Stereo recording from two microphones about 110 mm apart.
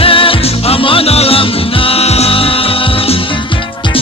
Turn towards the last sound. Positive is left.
turn(degrees=60)  # may be behind; listen again after turning